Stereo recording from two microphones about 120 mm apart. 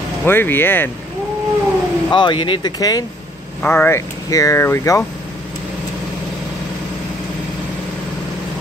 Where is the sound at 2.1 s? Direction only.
40° left (ahead or behind).